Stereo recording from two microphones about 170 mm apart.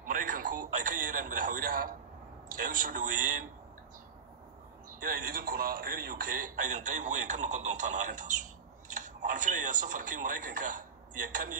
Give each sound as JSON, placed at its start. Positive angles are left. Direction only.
{"t": 0.0, "sound": "radio", "side_deg": -50}
{"t": 2.5, "sound": "a man's voice", "side_deg": -55}
{"t": 5.0, "sound": "a man's voice", "side_deg": -55}